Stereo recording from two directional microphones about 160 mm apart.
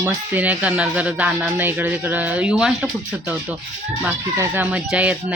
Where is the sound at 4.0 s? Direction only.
15° right (ahead or behind).